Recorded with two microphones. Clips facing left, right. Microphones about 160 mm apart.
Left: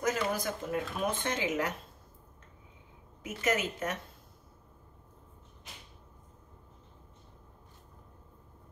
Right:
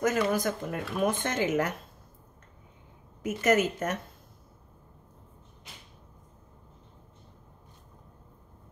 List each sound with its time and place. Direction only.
0.0 s speech: 55° right (ahead or behind)
3.2 s speech: 45° right (ahead or behind)